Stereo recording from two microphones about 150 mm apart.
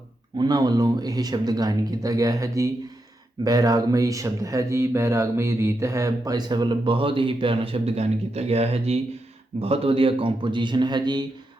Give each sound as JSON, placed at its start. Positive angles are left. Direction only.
{"t": 0.3, "sound": "a man's voice", "side_deg": -25}